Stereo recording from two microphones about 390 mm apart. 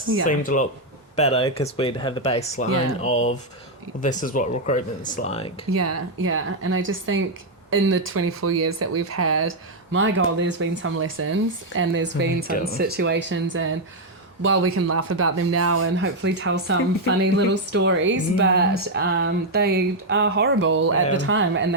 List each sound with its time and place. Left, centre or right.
0.3 s speech: centre
5.7 s speech: right